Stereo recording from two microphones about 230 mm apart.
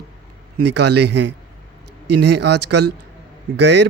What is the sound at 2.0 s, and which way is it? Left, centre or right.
Speech, right.